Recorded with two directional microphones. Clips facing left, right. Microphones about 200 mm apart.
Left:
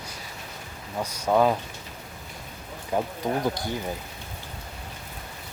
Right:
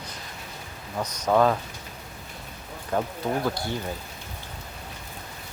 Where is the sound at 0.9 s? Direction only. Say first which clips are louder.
Even; 10° left (ahead or behind).